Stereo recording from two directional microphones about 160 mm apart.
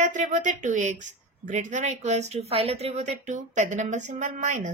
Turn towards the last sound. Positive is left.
turn(degrees=-50)  # may be behind; listen again after turning